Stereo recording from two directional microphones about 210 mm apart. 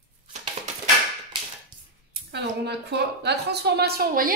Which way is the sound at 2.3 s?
55° right (ahead or behind).